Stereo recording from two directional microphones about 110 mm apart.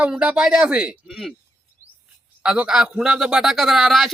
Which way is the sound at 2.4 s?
10° right (ahead or behind).